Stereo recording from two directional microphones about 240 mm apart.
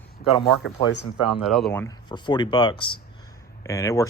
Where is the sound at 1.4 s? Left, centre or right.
Centre.